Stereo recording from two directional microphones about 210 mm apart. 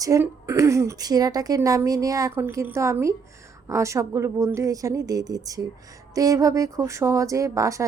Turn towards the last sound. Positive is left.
turn(degrees=-15)  # may be behind; listen again after turning